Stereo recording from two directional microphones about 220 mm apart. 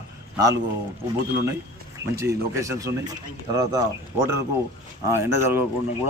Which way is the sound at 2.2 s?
15° right (ahead or behind).